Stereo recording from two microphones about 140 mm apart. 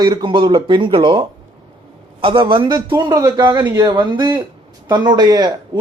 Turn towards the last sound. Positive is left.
turn(degrees=-30)  # may be behind; listen again after turning